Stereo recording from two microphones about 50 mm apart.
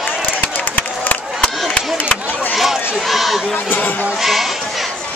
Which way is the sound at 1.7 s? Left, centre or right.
Left.